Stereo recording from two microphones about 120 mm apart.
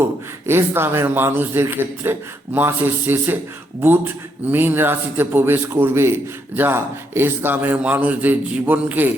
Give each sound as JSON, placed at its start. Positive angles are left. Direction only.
{"t": 0.0, "sound": "a man's voice", "side_deg": -20}